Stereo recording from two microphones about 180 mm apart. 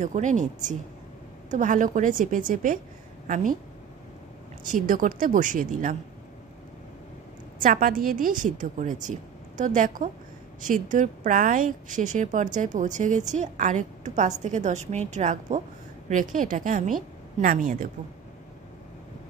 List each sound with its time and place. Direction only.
0.0 s a woman's voice: 45° right (ahead or behind)
4.6 s a woman's voice: 50° right (ahead or behind)
7.6 s a woman's voice: 50° right (ahead or behind)